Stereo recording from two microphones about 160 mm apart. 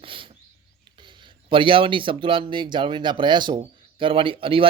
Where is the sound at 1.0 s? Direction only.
30° right (ahead or behind).